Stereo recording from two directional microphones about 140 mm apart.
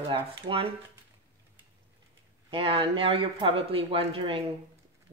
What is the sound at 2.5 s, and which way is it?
Speech, 40° right (ahead or behind).